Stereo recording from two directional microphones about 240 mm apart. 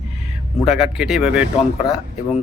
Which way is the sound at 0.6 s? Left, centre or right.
Centre.